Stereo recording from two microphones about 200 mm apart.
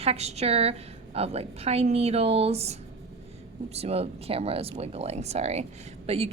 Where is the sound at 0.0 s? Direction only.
30° right (ahead or behind).